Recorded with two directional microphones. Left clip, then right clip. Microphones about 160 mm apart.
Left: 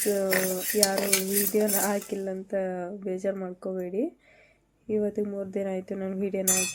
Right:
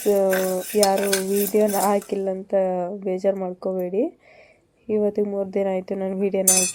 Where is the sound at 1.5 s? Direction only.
15° right (ahead or behind).